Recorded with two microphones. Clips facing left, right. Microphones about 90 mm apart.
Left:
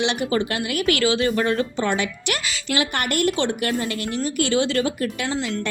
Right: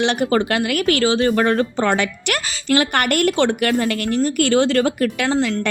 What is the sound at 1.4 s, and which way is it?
Speech, 50° right (ahead or behind).